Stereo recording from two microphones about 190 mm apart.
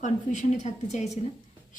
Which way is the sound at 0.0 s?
40° left (ahead or behind).